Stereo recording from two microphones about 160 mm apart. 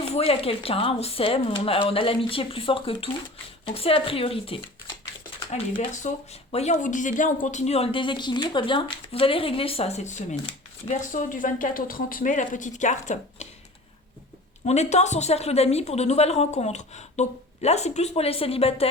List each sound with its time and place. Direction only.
0.0 s speech: 35° left (ahead or behind)
5.5 s a woman's voice: 45° left (ahead or behind)
14.6 s a woman's voice: 45° left (ahead or behind)